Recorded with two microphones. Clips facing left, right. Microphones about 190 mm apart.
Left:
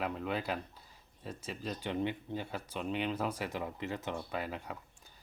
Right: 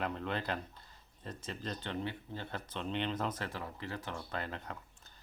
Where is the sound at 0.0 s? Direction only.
5° left (ahead or behind).